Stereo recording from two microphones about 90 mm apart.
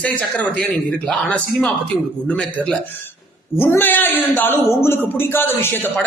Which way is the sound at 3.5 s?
25° left (ahead or behind).